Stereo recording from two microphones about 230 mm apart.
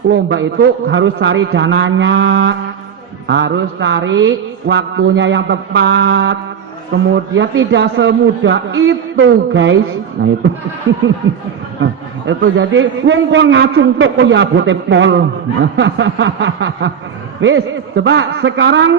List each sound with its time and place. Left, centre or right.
0.1 s a man's voice: right
11.8 s a sound: right
12.5 s a man's voice: right